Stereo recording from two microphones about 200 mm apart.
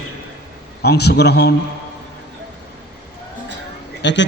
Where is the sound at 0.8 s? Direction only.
55° left (ahead or behind).